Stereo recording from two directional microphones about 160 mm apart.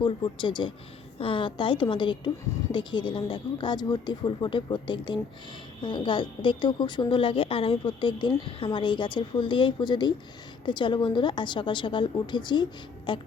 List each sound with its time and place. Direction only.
0.0 s a woman's voice: 30° left (ahead or behind)